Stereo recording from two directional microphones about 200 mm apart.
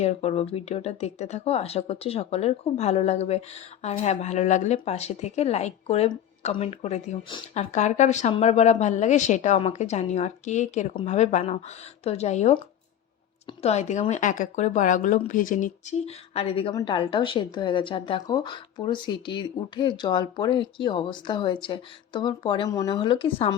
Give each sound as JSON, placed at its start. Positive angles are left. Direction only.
{"t": 0.0, "sound": "speech", "side_deg": 30}